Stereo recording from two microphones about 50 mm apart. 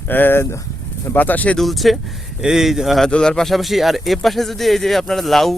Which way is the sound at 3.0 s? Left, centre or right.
Centre.